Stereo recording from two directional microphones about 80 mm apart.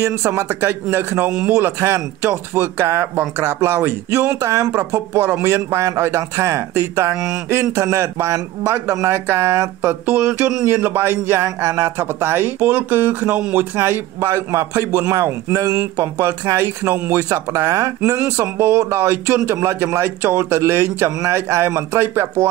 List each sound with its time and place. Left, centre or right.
0.0 s a man's voice: right
5.1 s a man's voice: right
10.0 s a man's voice: right
17.3 s a man's voice: right
18.3 s a man's voice: right